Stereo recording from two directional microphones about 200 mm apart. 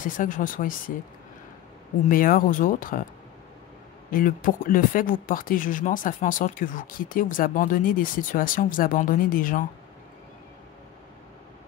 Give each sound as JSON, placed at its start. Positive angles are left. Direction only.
{"t": 0.0, "sound": "speech", "side_deg": 40}
{"t": 2.0, "sound": "speech", "side_deg": 45}
{"t": 4.1, "sound": "speech", "side_deg": 45}